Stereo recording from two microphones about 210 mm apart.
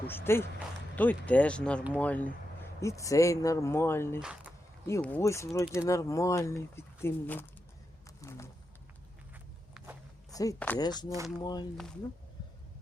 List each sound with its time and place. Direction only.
0.1 s speech: 10° left (ahead or behind)
4.2 s speech: 5° right (ahead or behind)
4.9 s speech: 10° left (ahead or behind)
8.2 s a sound: 15° left (ahead or behind)
9.8 s a sound: centre (ahead or behind)
10.3 s speech: 15° left (ahead or behind)
11.1 s speech: 15° right (ahead or behind)
11.4 s speech: 20° left (ahead or behind)